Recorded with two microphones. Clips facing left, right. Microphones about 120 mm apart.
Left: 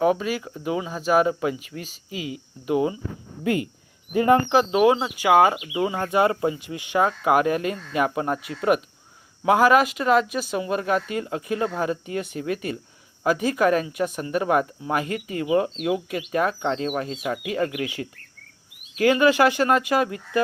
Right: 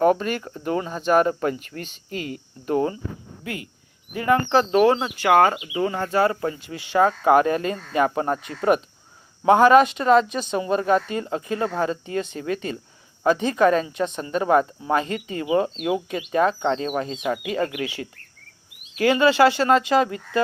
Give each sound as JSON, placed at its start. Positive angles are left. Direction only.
{"t": 0.0, "sound": "speech", "side_deg": 5}
{"t": 3.4, "sound": "speech", "side_deg": 25}
{"t": 4.4, "sound": "speech", "side_deg": 15}
{"t": 17.7, "sound": "speech", "side_deg": 10}
{"t": 19.2, "sound": "speech", "side_deg": 15}